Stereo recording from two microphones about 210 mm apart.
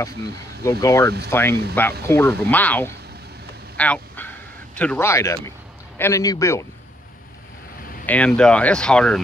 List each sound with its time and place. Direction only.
0.7 s speech: 15° left (ahead or behind)
3.7 s bow-wow: 5° left (ahead or behind)
5.9 s speech: 15° left (ahead or behind)
8.1 s speech: 5° left (ahead or behind)